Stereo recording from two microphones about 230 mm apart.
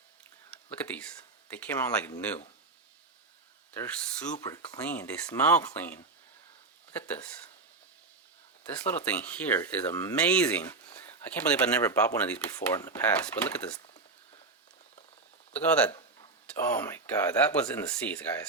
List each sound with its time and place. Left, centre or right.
0.5 s whispering: centre
1.5 s speech: centre
4.4 s speech: centre
8.8 s speech: centre
15.6 s speech: centre
16.0 s a sound: centre
16.6 s speech: centre